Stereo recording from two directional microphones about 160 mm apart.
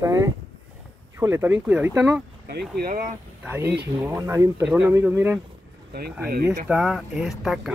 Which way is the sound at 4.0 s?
15° right (ahead or behind).